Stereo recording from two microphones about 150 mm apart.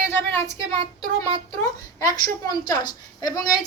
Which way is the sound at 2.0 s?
25° left (ahead or behind).